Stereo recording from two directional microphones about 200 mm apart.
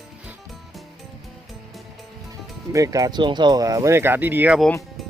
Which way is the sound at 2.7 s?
15° right (ahead or behind).